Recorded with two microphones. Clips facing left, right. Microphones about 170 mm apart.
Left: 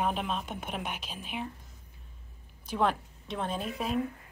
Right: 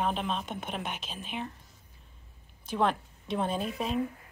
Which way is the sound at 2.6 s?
10° left (ahead or behind).